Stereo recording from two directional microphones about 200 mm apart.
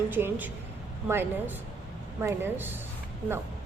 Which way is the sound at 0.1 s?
10° right (ahead or behind).